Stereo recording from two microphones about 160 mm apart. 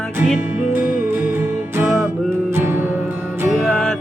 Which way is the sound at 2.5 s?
15° right (ahead or behind).